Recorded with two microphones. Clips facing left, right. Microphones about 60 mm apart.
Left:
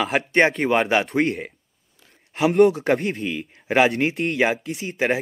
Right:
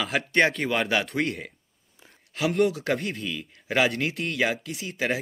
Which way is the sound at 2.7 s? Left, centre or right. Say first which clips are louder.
Left 6 dB; left.